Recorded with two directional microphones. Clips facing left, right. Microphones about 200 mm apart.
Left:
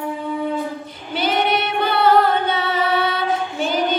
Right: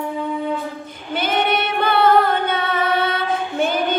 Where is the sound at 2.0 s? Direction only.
55° right (ahead or behind).